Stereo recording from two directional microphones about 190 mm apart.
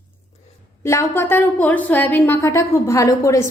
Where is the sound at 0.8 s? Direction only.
15° left (ahead or behind).